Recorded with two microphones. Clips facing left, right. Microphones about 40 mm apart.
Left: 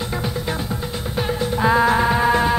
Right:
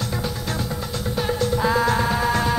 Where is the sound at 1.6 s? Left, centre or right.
Left.